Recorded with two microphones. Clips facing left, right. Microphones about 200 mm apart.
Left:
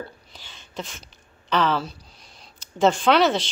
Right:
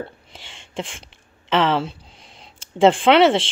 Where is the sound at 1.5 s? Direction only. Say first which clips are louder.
Right 3 dB; 25° right (ahead or behind).